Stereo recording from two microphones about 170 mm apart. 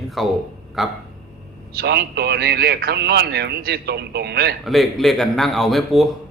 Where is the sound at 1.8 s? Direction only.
75° right (ahead or behind).